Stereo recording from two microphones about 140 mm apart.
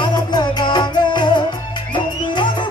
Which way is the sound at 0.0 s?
30° left (ahead or behind).